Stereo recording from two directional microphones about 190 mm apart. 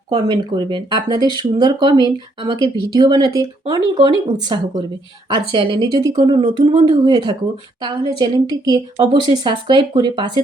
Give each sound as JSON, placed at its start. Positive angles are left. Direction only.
{"t": 0.1, "sound": "speech", "side_deg": -20}